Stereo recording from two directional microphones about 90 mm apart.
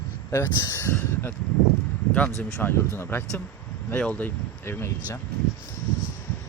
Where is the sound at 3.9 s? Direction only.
15° left (ahead or behind).